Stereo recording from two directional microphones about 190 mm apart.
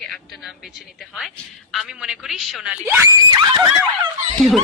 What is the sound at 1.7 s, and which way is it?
Screaming, 5° right (ahead or behind).